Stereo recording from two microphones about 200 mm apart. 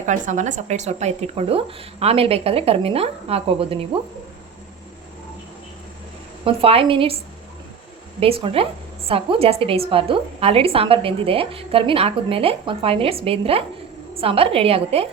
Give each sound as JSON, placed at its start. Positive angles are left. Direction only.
{"t": 0.0, "sound": "speech", "side_deg": -35}
{"t": 6.4, "sound": "a woman's voice", "side_deg": -30}
{"t": 8.2, "sound": "a woman's voice", "side_deg": -25}